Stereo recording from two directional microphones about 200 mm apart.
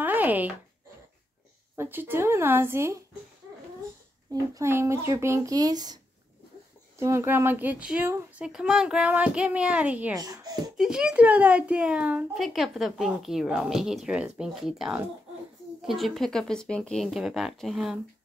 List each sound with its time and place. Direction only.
0.0 s a sound: 10° right (ahead or behind)
1.8 s speech: 10° right (ahead or behind)
4.3 s speech: 15° right (ahead or behind)
7.0 s speech: 15° right (ahead or behind)
10.1 s a child's voice: 20° right (ahead or behind)
10.8 s speech: 5° right (ahead or behind)